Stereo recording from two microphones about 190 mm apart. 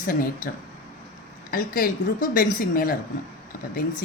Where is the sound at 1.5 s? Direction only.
50° left (ahead or behind).